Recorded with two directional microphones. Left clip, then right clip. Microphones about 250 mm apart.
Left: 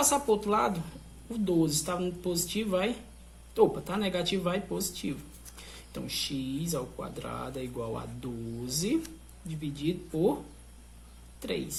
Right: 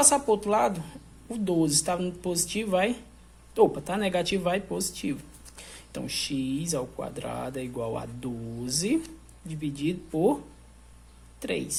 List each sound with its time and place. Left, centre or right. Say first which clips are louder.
0.1 s speech: right 3 dB; right
11.3 s speech: right 4 dB; right